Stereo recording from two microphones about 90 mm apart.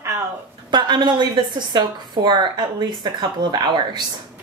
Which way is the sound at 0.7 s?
55° right (ahead or behind).